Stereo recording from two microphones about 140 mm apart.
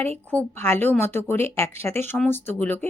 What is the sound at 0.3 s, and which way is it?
Speech, 15° left (ahead or behind).